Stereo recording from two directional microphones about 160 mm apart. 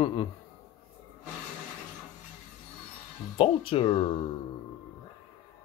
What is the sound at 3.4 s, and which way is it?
Speech, 35° left (ahead or behind).